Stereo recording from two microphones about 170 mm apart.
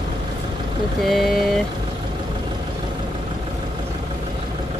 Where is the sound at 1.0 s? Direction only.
Centre (ahead or behind).